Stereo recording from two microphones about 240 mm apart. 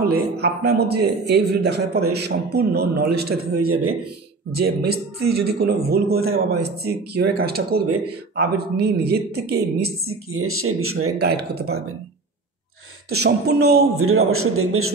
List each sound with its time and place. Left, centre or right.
0.0 s a man's voice: right
3.5 s speech: right
4.6 s a man's voice: right
10.0 s speech: right
11.1 s speech: right
13.1 s speech: right
13.9 s speech: right